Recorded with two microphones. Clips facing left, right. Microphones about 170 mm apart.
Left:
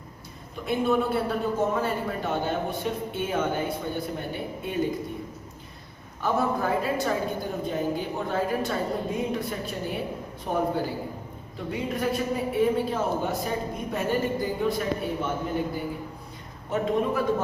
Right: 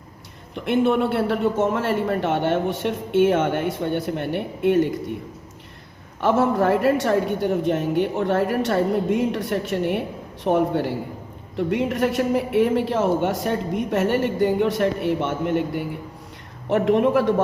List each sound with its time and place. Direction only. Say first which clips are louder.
0.5 s a man's voice: right 5 dB; 75° right (ahead or behind)
6.1 s a man's voice: right 7 dB; 80° right